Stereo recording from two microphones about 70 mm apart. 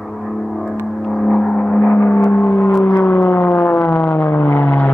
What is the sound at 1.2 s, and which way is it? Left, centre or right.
Gong, centre.